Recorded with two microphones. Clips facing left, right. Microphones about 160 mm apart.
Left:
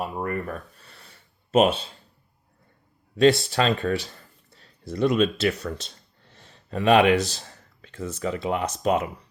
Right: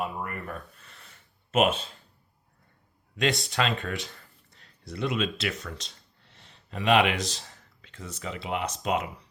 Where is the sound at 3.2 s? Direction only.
35° left (ahead or behind).